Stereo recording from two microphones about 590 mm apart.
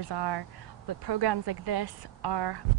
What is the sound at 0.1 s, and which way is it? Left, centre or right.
Speech, right.